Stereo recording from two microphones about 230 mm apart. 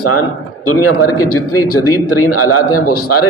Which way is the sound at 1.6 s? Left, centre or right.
Left.